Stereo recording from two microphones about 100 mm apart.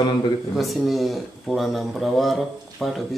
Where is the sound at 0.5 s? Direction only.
Centre (ahead or behind).